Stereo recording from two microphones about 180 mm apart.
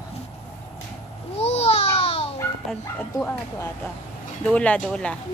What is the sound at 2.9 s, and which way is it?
Speech, 10° left (ahead or behind).